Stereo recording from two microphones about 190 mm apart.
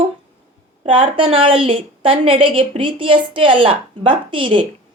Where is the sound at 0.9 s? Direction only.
25° right (ahead or behind).